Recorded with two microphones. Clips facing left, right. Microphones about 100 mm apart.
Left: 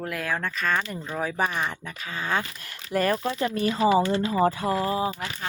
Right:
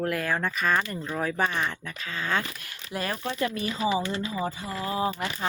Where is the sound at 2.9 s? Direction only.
50° left (ahead or behind).